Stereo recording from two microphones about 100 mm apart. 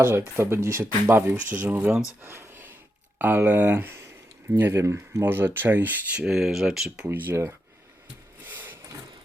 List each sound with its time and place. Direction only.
0.1 s speech: 25° right (ahead or behind)
2.2 s a sound: 25° right (ahead or behind)
3.2 s speech: 15° right (ahead or behind)
6.2 s speech: 5° right (ahead or behind)
7.1 s speech: 20° right (ahead or behind)
8.4 s wood: 20° right (ahead or behind)